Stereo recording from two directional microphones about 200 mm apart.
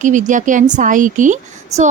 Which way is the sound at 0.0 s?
40° right (ahead or behind).